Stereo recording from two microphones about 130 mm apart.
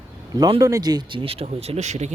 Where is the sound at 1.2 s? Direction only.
50° right (ahead or behind).